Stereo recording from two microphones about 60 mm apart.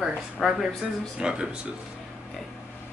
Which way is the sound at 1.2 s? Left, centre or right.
Centre.